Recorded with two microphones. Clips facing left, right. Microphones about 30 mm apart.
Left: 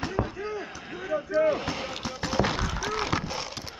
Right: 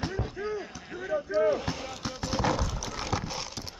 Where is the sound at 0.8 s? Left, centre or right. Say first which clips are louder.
Left 1 dB; left.